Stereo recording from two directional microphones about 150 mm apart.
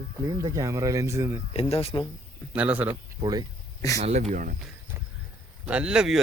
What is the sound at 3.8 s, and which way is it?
Speech, 20° left (ahead or behind).